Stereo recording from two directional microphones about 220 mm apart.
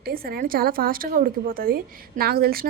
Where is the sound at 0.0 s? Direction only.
45° right (ahead or behind).